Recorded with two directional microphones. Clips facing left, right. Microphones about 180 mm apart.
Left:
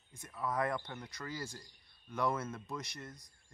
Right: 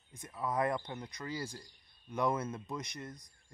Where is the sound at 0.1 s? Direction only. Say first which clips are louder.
Right 2 dB; 20° right (ahead or behind).